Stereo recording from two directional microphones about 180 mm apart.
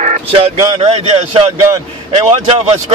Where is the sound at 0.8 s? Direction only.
35° right (ahead or behind).